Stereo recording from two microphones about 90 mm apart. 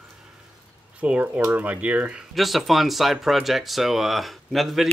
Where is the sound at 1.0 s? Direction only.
15° right (ahead or behind).